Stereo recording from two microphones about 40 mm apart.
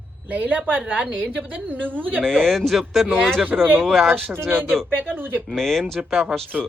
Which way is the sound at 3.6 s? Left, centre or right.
Right.